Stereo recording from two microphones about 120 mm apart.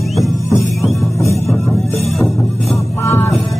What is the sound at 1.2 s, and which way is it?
Music, 25° left (ahead or behind).